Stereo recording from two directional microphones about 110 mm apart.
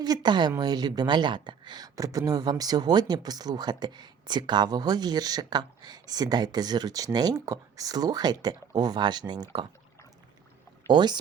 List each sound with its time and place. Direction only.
0.0 s speech: 40° right (ahead or behind)
10.8 s speech: 40° right (ahead or behind)